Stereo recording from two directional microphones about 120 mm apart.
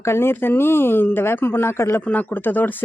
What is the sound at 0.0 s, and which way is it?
Speech, 20° left (ahead or behind).